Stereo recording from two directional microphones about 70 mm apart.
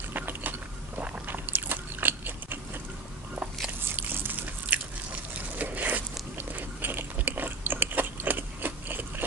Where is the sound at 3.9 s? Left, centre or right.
Right.